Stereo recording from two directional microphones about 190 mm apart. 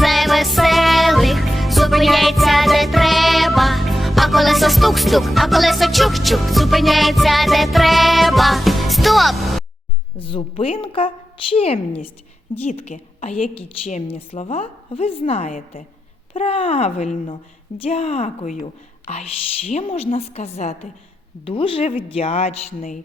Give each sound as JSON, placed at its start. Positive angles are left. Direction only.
{"t": 0.0, "sound": "music", "side_deg": 0}
{"t": 10.2, "sound": "a woman's voice", "side_deg": 30}